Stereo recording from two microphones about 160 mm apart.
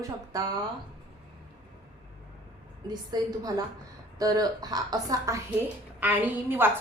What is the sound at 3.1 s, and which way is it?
A woman's voice, 25° right (ahead or behind).